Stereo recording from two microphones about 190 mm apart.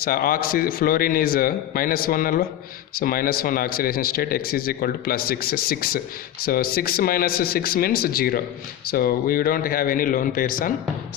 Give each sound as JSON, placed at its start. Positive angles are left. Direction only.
{"t": 0.0, "sound": "speech", "side_deg": 50}